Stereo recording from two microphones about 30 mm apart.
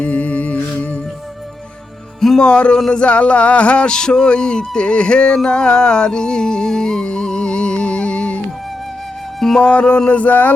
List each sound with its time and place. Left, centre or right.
0.0 s humming: left
2.4 s music: left
3.8 s music: left
9.4 s music: centre
9.7 s music: left
10.1 s a sound: left